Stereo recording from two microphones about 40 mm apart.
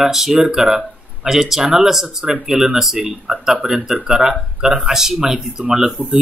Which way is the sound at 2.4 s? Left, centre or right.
Right.